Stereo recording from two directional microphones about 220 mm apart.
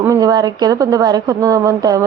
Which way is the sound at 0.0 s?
15° right (ahead or behind).